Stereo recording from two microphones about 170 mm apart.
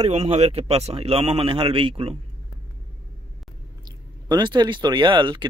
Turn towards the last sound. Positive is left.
turn(degrees=-25)  # may be behind; listen again after turning